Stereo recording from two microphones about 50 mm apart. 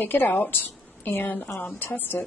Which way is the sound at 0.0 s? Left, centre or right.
Left.